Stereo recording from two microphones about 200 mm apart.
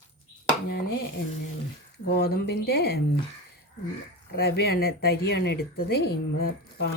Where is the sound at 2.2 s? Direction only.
50° left (ahead or behind).